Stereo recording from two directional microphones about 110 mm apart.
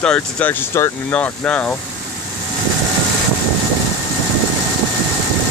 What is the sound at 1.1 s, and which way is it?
Speech, 10° left (ahead or behind).